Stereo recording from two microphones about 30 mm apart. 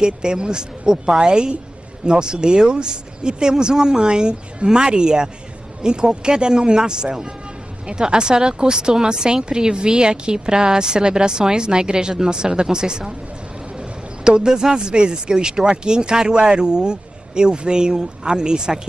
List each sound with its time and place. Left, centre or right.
0.0 s speech: right